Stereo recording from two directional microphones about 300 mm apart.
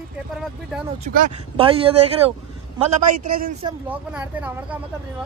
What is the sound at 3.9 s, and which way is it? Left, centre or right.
Speech, centre.